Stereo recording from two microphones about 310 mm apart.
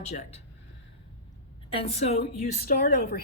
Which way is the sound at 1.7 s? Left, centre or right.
Centre.